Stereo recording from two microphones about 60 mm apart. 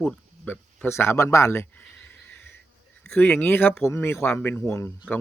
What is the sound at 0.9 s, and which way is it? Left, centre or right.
Speech, left.